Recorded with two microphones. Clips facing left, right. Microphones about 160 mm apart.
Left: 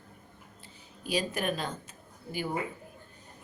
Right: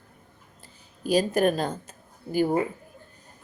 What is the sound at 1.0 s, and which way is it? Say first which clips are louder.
Speech: right 9 dB; 45° right (ahead or behind).